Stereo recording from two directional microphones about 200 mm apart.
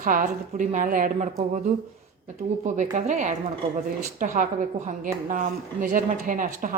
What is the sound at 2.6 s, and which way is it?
Speech, 40° right (ahead or behind).